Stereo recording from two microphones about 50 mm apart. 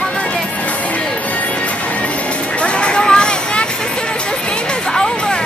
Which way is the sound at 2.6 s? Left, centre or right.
Centre.